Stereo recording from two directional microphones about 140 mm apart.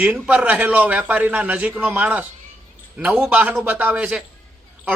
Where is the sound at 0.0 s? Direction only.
10° right (ahead or behind).